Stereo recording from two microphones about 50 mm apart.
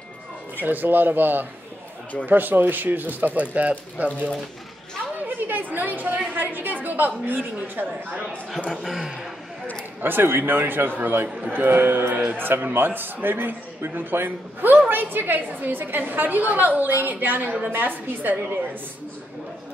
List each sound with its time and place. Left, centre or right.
0.7 s a woman's voice: right
5.2 s chatter: right
6.3 s a woman's voice: right
8.8 s speech: centre
10.0 s a man's voice: right